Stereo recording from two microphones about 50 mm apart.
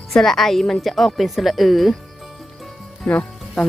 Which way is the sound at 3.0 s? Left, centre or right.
Left.